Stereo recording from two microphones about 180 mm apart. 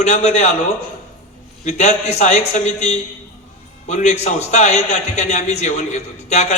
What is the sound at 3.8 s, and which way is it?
A man's voice, 40° left (ahead or behind).